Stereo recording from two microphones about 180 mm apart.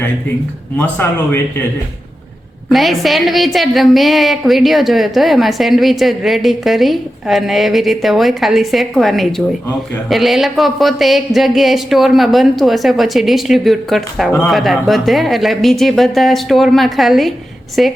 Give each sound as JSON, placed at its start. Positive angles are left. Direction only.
{"t": 0.8, "sound": "speech", "side_deg": 10}
{"t": 2.6, "sound": "a woman's voice", "side_deg": 0}